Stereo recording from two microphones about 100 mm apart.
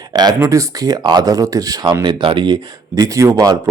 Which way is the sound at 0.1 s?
45° right (ahead or behind).